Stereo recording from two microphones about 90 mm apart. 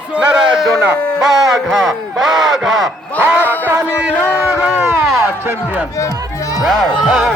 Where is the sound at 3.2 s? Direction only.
20° right (ahead or behind).